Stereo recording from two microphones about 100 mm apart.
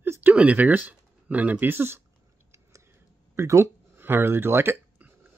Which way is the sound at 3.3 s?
30° right (ahead or behind).